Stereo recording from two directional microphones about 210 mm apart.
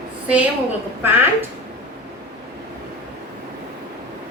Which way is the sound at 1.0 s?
10° right (ahead or behind).